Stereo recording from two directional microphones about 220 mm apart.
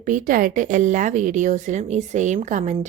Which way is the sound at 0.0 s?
35° right (ahead or behind).